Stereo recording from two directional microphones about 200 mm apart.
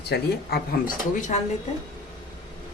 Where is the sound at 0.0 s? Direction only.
55° left (ahead or behind).